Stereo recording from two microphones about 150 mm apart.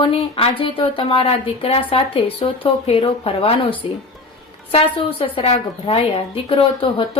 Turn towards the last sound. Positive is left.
turn(degrees=40)  # may be behind; listen again after turning